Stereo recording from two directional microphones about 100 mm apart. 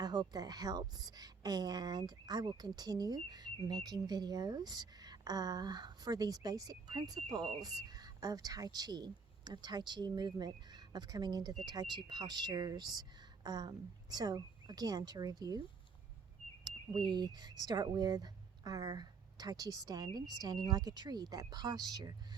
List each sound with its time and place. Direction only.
0.0 s a woman's voice: 45° right (ahead or behind)
16.6 s speech: 50° right (ahead or behind)